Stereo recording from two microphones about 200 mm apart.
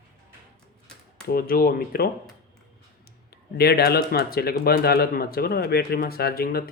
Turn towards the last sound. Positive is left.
turn(degrees=50)  # may be behind; listen again after turning